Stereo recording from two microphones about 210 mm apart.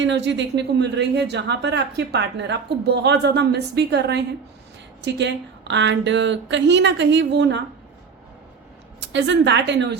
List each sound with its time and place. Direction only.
0.0 s a woman's voice: 60° right (ahead or behind)
9.0 s a woman's voice: 60° right (ahead or behind)